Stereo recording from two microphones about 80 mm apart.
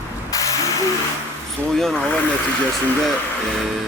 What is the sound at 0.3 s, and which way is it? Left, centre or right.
Hiss, left.